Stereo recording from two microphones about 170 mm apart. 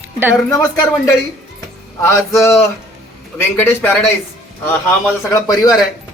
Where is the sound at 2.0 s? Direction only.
15° left (ahead or behind).